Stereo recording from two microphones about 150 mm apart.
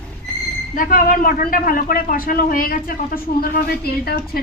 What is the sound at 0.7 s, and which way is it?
Speech, 65° left (ahead or behind).